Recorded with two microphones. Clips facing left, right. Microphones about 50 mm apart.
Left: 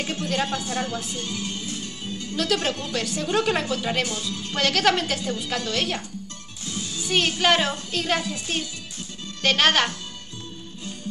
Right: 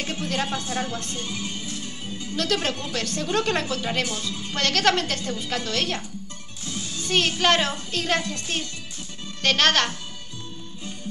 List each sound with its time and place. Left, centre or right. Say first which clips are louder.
0.0 s a sound: left 1 dB; centre
0.6 s speech: left 1 dB; centre
1.1 s speech: left 1 dB; right
2.3 s speech: left 1 dB; centre
4.3 s speech: left 1 dB; centre
4.6 s a woman's voice: left 1 dB; centre